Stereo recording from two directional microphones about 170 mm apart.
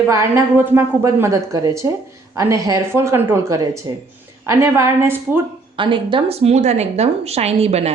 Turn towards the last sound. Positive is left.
turn(degrees=-40)  # may be behind; listen again after turning